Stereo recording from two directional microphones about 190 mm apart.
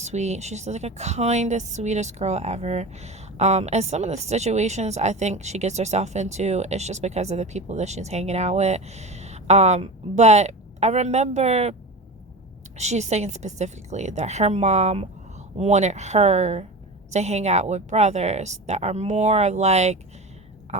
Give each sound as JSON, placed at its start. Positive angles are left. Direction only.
{"t": 0.0, "sound": "a woman's voice", "side_deg": -35}
{"t": 12.7, "sound": "a woman's voice", "side_deg": -35}